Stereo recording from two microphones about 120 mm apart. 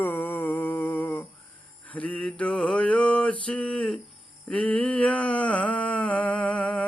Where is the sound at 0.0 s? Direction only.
15° left (ahead or behind).